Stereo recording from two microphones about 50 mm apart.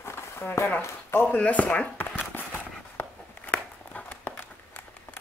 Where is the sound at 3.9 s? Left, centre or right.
Left.